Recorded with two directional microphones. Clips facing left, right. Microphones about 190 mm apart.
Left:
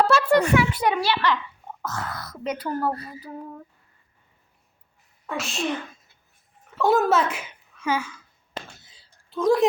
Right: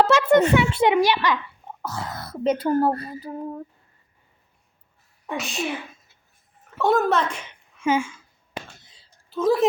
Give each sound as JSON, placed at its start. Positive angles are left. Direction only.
{"t": 0.1, "sound": "a child's voice", "side_deg": -20}
{"t": 1.8, "sound": "a sound", "side_deg": -10}
{"t": 2.1, "sound": "a child's voice", "side_deg": -30}
{"t": 5.4, "sound": "speech", "side_deg": 0}
{"t": 7.8, "sound": "speech", "side_deg": -25}
{"t": 8.9, "sound": "a sound", "side_deg": 0}